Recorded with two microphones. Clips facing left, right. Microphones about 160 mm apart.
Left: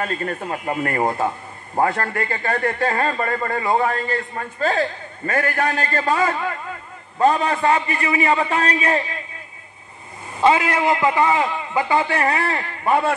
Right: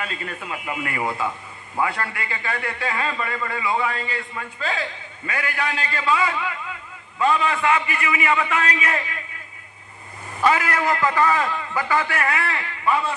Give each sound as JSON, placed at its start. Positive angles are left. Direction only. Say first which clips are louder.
{"t": 0.0, "sound": "a man's voice", "louder": "left 7 dB", "side_deg": 45}
{"t": 10.4, "sound": "a man's voice", "louder": "left 4 dB", "side_deg": 25}
{"t": 12.8, "sound": "a man's voice", "louder": "left 4 dB", "side_deg": 55}